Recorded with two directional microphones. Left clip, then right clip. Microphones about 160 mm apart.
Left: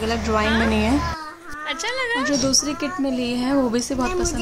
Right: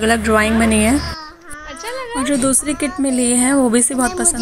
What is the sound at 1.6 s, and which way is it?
Speech, centre (ahead or behind).